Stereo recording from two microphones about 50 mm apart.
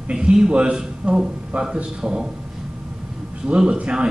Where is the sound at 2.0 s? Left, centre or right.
Centre.